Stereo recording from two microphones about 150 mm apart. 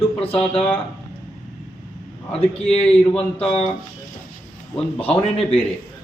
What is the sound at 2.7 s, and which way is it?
Speech, 40° left (ahead or behind).